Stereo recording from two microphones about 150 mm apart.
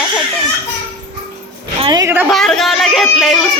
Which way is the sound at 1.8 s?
30° right (ahead or behind).